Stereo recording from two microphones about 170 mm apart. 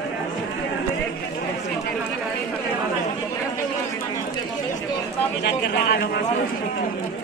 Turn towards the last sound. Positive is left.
turn(degrees=75)  # may be behind; listen again after turning